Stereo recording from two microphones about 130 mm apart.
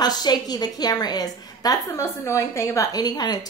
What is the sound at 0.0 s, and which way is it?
A woman's voice, 30° left (ahead or behind).